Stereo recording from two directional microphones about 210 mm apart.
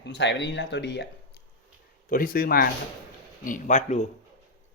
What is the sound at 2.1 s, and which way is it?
Speech, 45° left (ahead or behind).